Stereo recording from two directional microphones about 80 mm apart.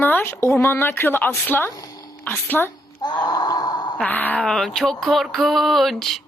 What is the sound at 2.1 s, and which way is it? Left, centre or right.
Speech, left.